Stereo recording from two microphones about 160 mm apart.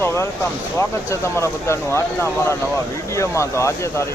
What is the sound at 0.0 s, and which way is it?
Speech, 15° left (ahead or behind).